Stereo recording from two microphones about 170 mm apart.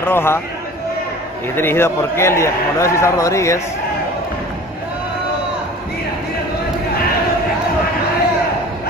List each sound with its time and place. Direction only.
0.0 s a man's voice: 15° left (ahead or behind)
1.5 s a man's voice: 15° left (ahead or behind)